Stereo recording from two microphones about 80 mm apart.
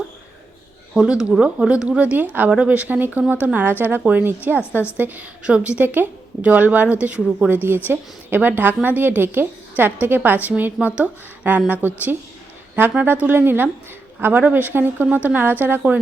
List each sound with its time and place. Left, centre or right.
0.9 s speech: centre
2.1 s a woman's voice: right